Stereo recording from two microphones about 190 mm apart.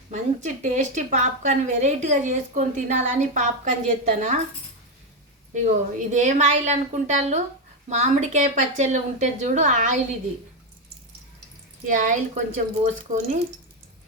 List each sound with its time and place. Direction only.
0.1 s a woman's voice: 40° right (ahead or behind)
5.6 s a woman's voice: 40° right (ahead or behind)
11.9 s a woman's voice: 40° right (ahead or behind)